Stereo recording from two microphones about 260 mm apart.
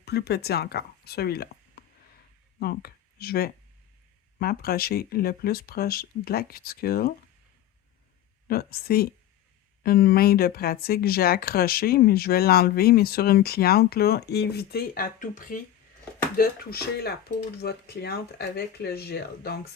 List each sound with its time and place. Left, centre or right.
0.0 s speech: left
8.4 s speech: left